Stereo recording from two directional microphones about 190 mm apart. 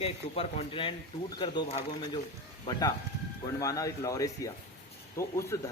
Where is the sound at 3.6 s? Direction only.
15° left (ahead or behind).